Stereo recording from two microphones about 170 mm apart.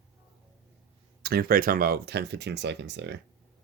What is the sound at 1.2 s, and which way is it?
Speech, 65° right (ahead or behind).